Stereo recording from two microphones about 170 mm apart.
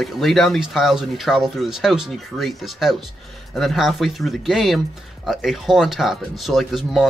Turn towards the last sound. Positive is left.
turn(degrees=0)  # may be behind; listen again after turning